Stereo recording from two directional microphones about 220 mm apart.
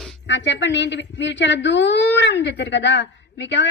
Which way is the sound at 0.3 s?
55° left (ahead or behind).